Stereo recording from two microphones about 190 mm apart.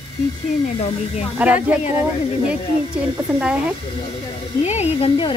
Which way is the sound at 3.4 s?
5° right (ahead or behind).